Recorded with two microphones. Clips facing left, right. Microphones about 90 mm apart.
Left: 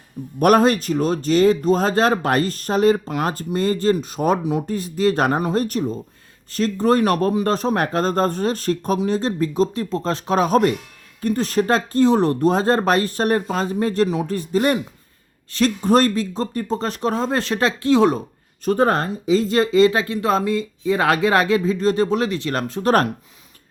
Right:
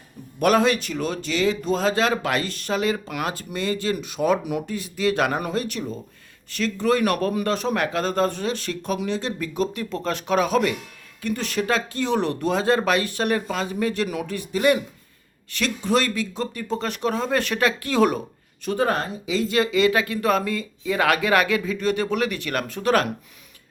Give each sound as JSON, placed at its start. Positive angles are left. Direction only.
{"t": 0.3, "sound": "speech", "side_deg": 45}
{"t": 18.6, "sound": "speech", "side_deg": 40}